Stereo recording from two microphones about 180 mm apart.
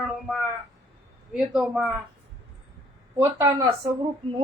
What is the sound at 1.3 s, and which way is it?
Speech, centre (ahead or behind).